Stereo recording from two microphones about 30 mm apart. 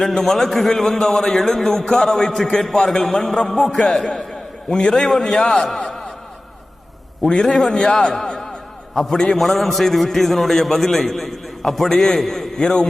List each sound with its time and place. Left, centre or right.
0.1 s a man's voice: centre
4.7 s a man's voice: left
5.6 s speech: centre
7.4 s a man's voice: centre
7.7 s a man's voice: left
9.0 s a man's voice: centre
9.4 s a man's voice: centre
11.9 s a man's voice: centre
12.5 s a man's voice: left